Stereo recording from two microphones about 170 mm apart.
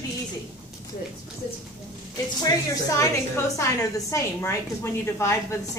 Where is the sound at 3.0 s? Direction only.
15° left (ahead or behind).